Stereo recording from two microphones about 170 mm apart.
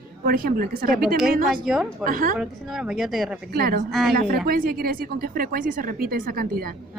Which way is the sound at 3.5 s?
70° right (ahead or behind).